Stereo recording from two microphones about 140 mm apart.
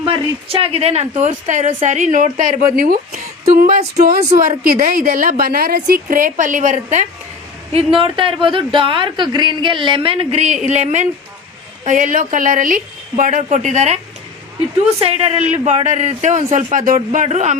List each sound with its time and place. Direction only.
0.0 s a woman's voice: 40° right (ahead or behind); by 3.2 s 85° right
3.6 s a woman's voice: 65° right (ahead or behind)
4.4 s a woman's voice: 85° right; by 7.0 s 65° right (ahead or behind)
7.7 s a woman's voice: 45° right (ahead or behind)
11.9 s a woman's voice: 70° right (ahead or behind); by 14.0 s 55° right (ahead or behind)
15.0 s a man's voice: 45° right (ahead or behind)
16.7 s a woman's voice: 75° right (ahead or behind); by 17.6 s 55° right (ahead or behind)